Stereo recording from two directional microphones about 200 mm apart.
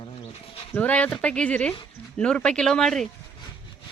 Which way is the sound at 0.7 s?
5° left (ahead or behind).